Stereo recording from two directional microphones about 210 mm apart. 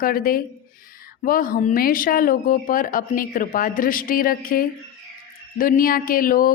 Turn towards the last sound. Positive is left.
turn(degrees=40)  # may be behind; listen again after turning